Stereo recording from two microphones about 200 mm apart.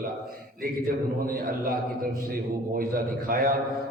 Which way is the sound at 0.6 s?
45° right (ahead or behind).